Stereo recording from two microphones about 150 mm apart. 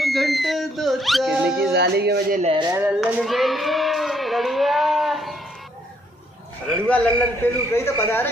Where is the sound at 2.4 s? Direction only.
35° right (ahead or behind).